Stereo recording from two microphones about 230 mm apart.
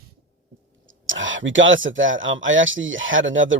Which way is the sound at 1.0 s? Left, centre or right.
Right.